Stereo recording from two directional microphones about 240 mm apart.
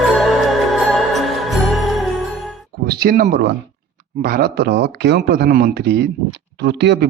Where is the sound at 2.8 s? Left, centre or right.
Right.